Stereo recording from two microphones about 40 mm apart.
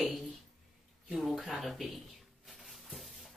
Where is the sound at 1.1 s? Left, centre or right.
Centre.